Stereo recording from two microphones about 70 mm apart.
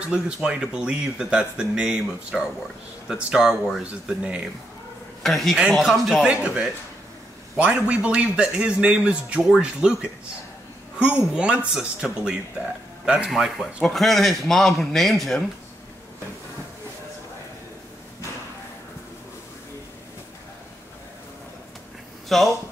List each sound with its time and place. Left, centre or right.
0.0 s speech: centre
5.2 s a man's voice: centre
6.2 s speech: centre
11.0 s a man's voice: centre
13.8 s a man's voice: centre
22.3 s a man's voice: centre